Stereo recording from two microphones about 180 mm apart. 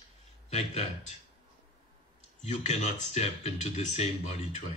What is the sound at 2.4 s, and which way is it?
Speech, 40° left (ahead or behind).